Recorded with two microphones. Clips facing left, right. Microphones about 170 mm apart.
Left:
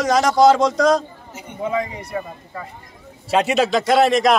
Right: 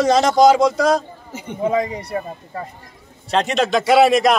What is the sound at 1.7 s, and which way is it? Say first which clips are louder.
Speech: right 3 dB; 35° right (ahead or behind).